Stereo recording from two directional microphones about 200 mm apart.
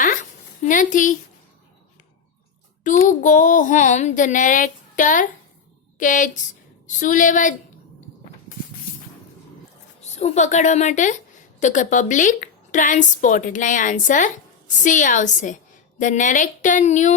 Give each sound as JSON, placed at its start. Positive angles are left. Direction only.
{"t": 0.0, "sound": "a sound", "side_deg": 40}
{"t": 2.8, "sound": "a woman's voice", "side_deg": 40}
{"t": 10.0, "sound": "a woman's voice", "side_deg": 35}